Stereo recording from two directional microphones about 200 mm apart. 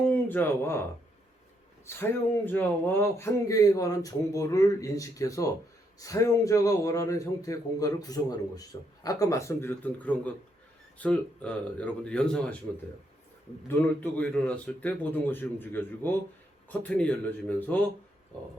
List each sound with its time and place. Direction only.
0.1 s speech: 10° left (ahead or behind)
1.9 s speech: 10° left (ahead or behind)
13.7 s speech: 10° left (ahead or behind)